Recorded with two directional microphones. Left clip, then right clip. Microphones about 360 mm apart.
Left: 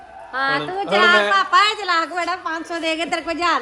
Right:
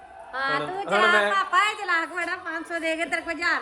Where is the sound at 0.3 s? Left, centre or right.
Left.